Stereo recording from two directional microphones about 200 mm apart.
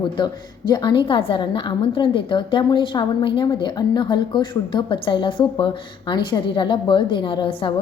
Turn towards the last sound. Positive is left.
turn(degrees=25)  # may be behind; listen again after turning